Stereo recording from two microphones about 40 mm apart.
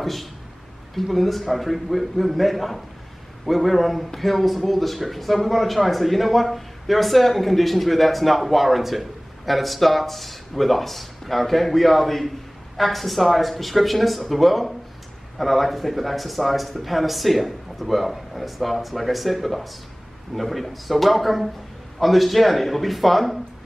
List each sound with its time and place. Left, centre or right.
0.0 s a man's voice: centre